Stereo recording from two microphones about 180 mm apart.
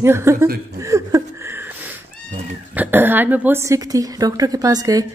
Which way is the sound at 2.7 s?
10° right (ahead or behind).